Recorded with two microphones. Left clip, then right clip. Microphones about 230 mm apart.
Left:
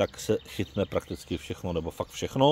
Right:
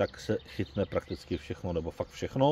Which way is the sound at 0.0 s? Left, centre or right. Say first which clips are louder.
Left 4 dB; left.